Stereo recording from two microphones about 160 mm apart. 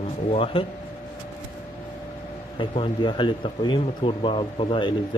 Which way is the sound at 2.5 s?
30° left (ahead or behind).